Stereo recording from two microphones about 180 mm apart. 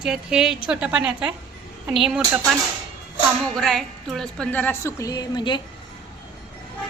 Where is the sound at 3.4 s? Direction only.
5° left (ahead or behind); by 5.6 s 25° left (ahead or behind).